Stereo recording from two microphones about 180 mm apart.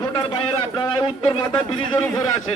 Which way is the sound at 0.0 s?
25° left (ahead or behind).